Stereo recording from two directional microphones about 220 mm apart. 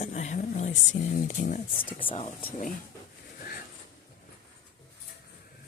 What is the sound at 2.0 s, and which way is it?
Speech, 25° left (ahead or behind).